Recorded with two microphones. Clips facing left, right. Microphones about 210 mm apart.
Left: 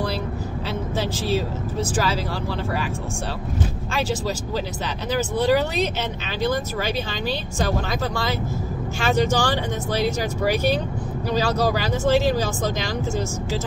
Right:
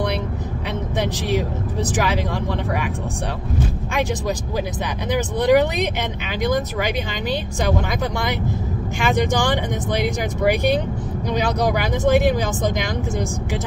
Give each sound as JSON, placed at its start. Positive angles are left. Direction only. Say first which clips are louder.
{"t": 0.9, "sound": "speech", "louder": "right 2 dB", "side_deg": -15}
{"t": 5.1, "sound": "speech", "louder": "right 3 dB", "side_deg": -15}
{"t": 9.0, "sound": "speech", "louder": "right 1 dB", "side_deg": -15}